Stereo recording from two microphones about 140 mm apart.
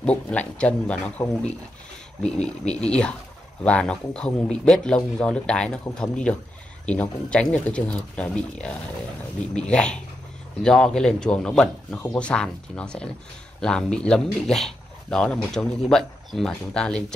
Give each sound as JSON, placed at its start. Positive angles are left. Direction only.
{"t": 0.0, "sound": "speech", "side_deg": 10}
{"t": 2.2, "sound": "speech", "side_deg": 5}